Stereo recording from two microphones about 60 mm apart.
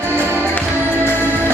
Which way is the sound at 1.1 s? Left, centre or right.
Left.